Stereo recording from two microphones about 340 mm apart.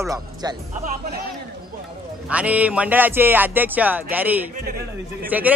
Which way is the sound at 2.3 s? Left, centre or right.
Centre.